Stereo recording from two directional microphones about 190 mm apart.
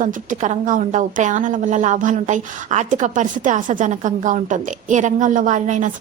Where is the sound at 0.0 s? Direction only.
45° right (ahead or behind).